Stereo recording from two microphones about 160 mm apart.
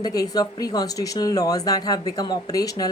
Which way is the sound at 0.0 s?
25° left (ahead or behind).